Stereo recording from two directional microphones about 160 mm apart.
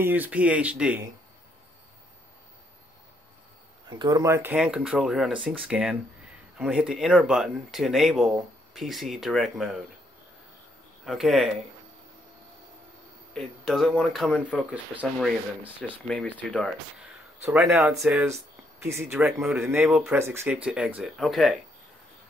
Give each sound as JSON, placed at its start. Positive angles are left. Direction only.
{"t": 0.0, "sound": "speech", "side_deg": -10}
{"t": 4.0, "sound": "speech", "side_deg": -20}
{"t": 11.1, "sound": "speech", "side_deg": 0}
{"t": 13.3, "sound": "speech", "side_deg": 0}
{"t": 17.4, "sound": "speech", "side_deg": -10}
{"t": 18.8, "sound": "speech", "side_deg": -15}